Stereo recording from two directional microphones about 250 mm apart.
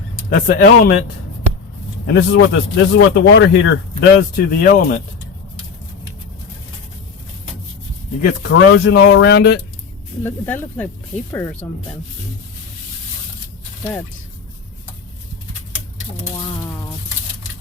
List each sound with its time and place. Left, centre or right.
0.3 s speech: left
2.1 s speech: left
8.2 s speech: left
10.2 s speech: centre